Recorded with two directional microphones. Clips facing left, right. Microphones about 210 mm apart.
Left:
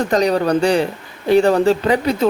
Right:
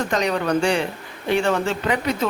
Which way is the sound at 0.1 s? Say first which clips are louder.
Left 6 dB; 35° left (ahead or behind).